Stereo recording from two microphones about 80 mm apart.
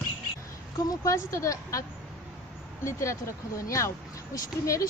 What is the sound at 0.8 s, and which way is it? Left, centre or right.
A woman's voice, left.